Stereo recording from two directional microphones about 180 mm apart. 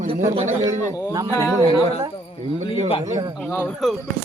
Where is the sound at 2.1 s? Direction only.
30° left (ahead or behind).